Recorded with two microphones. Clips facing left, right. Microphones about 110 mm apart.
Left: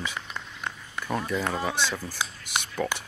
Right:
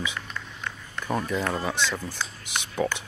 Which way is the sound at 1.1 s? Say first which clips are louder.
Right 1 dB; centre (ahead or behind).